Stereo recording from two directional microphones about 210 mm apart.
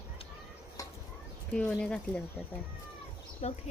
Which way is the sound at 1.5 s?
5° left (ahead or behind).